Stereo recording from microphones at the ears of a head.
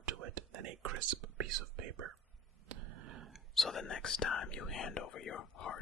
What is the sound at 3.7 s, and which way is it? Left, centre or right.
Speech, left.